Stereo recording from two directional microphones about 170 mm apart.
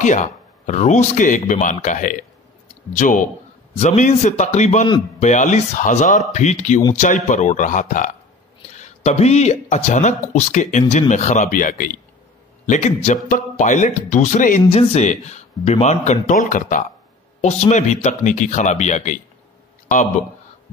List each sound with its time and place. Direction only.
0.0 s speech: 45° left (ahead or behind)